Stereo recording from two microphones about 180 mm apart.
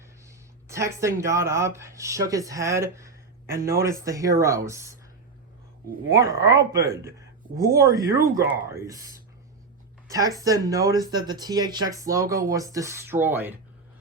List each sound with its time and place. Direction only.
0.3 s a sound: 15° right (ahead or behind)
1.2 s speech: 15° right (ahead or behind)
6.1 s speech: 20° right (ahead or behind)
10.1 s speech: 20° right (ahead or behind)